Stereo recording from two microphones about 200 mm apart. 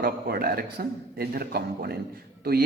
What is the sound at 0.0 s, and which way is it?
A man's voice, 50° right (ahead or behind).